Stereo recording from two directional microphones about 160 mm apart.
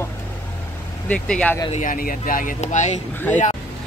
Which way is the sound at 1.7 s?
55° left (ahead or behind).